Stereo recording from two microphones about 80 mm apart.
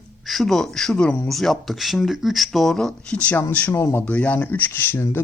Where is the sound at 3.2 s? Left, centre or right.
Centre.